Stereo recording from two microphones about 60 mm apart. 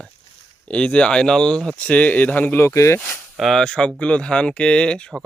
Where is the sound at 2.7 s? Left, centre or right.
Left.